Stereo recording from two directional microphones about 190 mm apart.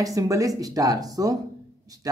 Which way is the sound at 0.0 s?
15° right (ahead or behind).